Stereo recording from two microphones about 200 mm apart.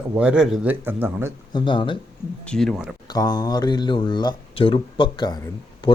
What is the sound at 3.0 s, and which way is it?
Speech, 20° left (ahead or behind).